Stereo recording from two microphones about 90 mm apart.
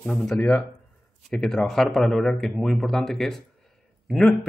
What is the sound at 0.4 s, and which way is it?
Speech, 20° left (ahead or behind).